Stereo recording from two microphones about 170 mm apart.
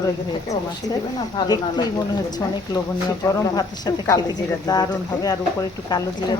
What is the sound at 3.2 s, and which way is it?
Speech, 20° left (ahead or behind).